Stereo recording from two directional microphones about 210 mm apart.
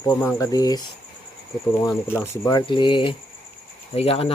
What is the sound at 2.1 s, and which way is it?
Speech, 15° left (ahead or behind).